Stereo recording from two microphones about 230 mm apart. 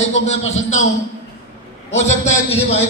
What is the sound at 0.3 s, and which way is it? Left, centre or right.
Speech, left.